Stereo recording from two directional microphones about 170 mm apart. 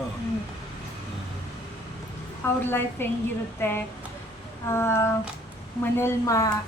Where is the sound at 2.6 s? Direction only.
10° left (ahead or behind).